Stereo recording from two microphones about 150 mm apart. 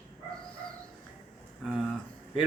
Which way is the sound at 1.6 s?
5° right (ahead or behind).